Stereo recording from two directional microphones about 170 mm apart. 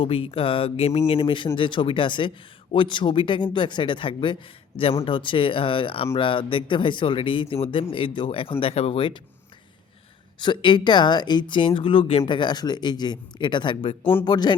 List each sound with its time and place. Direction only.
0.0 s speech: 35° left (ahead or behind)
10.4 s speech: 25° left (ahead or behind)